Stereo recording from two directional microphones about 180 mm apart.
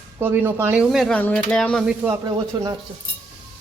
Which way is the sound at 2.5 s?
20° right (ahead or behind).